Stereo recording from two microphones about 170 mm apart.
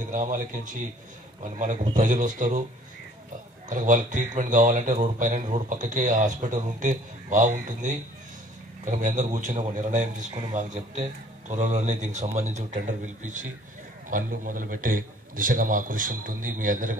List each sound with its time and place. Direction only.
0.1 s a man's voice: 50° right (ahead or behind)
3.6 s a man's voice: 50° right (ahead or behind)